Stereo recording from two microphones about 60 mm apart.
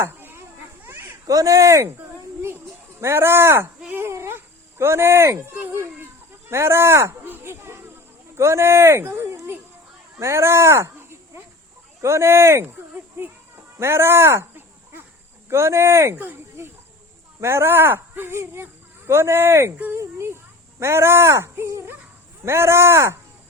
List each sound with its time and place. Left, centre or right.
0.0 s a sound: right
1.3 s speech: right
3.0 s speech: right
3.9 s dog: right
5.5 s a child's voice: right
5.7 s a sound: right
6.5 s speech: right
7.3 s a sound: right
7.5 s snake: right
8.4 s speech: right
13.7 s a sound: right
15.4 s speech: right
16.1 s speech: right
17.4 s speech: right